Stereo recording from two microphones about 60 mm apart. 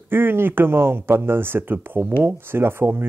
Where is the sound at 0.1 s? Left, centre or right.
Right.